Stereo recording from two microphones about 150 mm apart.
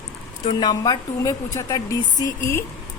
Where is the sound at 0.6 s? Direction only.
25° left (ahead or behind).